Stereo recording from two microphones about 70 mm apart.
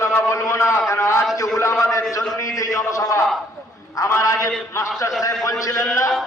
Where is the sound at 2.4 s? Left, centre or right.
Left.